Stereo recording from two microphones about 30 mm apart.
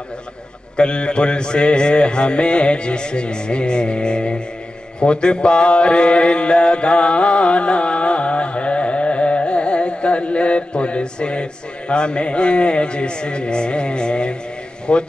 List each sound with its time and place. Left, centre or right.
0.7 s mantra: left